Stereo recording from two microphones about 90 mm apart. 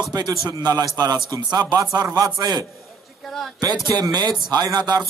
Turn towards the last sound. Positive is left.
turn(degrees=-50)  # may be behind; listen again after turning